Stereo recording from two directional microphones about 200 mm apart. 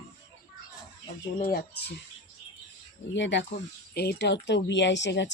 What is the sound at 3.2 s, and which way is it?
Speech, 60° left (ahead or behind).